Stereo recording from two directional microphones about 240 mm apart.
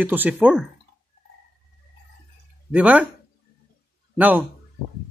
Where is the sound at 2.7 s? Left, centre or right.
Centre.